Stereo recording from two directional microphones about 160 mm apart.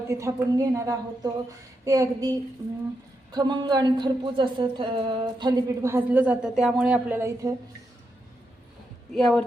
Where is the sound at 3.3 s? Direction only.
25° right (ahead or behind); by 7.1 s 5° right (ahead or behind).